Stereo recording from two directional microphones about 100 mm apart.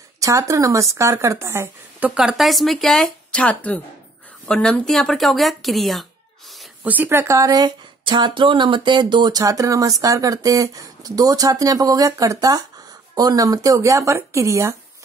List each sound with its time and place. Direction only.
0.2 s speech: 30° right (ahead or behind)
2.0 s speech: 5° right (ahead or behind)
6.8 s speech: 15° right (ahead or behind); by 7.7 s 35° right (ahead or behind)
8.0 s speech: 50° right (ahead or behind); by 14.8 s 30° right (ahead or behind)